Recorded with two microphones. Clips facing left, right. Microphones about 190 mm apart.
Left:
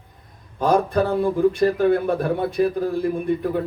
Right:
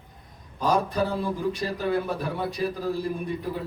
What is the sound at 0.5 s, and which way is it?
A man's voice, 55° left (ahead or behind).